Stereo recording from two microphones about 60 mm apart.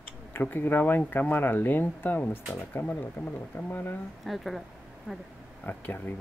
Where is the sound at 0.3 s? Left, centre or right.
Left.